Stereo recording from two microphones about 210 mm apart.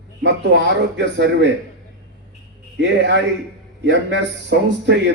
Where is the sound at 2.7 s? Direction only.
55° right (ahead or behind).